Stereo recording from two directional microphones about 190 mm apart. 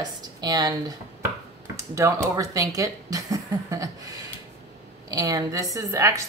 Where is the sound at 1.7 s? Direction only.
15° right (ahead or behind).